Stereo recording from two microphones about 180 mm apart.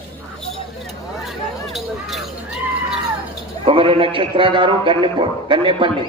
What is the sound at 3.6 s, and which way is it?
Speech, 30° right (ahead or behind).